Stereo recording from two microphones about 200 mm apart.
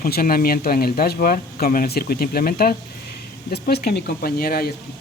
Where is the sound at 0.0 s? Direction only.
45° left (ahead or behind).